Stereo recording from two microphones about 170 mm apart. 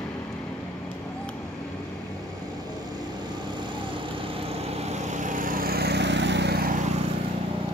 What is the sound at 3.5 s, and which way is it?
Vehicle, 30° right (ahead or behind).